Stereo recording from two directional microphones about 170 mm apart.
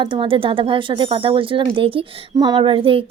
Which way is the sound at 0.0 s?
30° right (ahead or behind).